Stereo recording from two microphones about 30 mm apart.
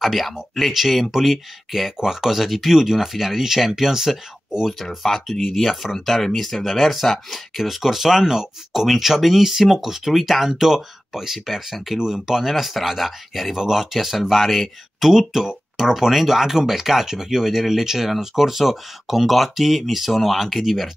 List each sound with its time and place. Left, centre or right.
0.0 s speech: centre
4.8 s speech: centre
12.0 s speech: centre
13.9 s speech: centre